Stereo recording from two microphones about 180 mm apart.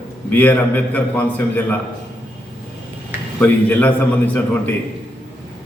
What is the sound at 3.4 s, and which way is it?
A man's voice, 10° left (ahead or behind).